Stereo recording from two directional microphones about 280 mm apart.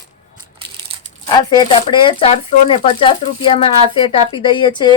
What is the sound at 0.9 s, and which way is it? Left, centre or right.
Crumpling, right.